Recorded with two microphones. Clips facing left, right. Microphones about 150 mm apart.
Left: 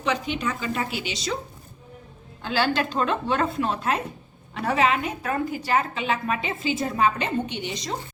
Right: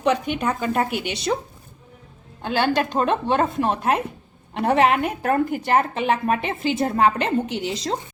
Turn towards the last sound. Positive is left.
turn(degrees=-75)  # may be behind; listen again after turning